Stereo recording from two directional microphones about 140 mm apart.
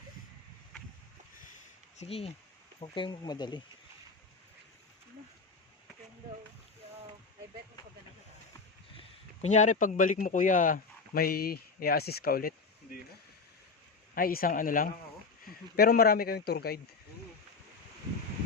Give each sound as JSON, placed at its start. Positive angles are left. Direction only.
{"t": 2.0, "sound": "speech", "side_deg": 45}
{"t": 9.0, "sound": "speech", "side_deg": 55}
{"t": 14.2, "sound": "speech", "side_deg": 90}
{"t": 15.4, "sound": "speech", "side_deg": 90}